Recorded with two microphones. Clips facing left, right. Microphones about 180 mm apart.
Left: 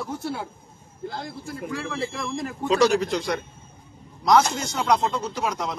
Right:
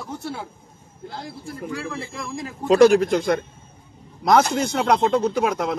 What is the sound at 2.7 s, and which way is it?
Speech, 50° right (ahead or behind).